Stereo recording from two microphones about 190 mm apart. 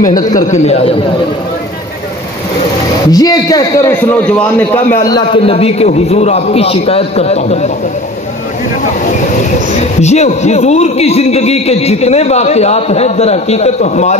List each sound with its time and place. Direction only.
0.4 s a man's voice: 35° left (ahead or behind)
3.1 s a man's voice: 20° left (ahead or behind); by 7.7 s 35° left (ahead or behind)
9.8 s a man's voice: 35° left (ahead or behind)